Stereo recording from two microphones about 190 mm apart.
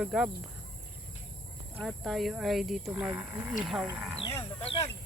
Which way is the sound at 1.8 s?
Centre (ahead or behind).